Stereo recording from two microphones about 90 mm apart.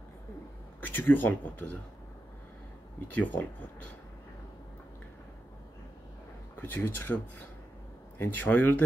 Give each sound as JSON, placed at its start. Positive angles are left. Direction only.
{"t": 0.7, "sound": "speech", "side_deg": 20}
{"t": 3.2, "sound": "speech", "side_deg": 20}
{"t": 6.6, "sound": "speech", "side_deg": 20}